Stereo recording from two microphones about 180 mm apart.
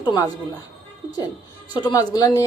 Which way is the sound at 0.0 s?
20° left (ahead or behind).